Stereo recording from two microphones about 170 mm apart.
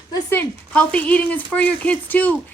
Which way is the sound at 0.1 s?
10° left (ahead or behind).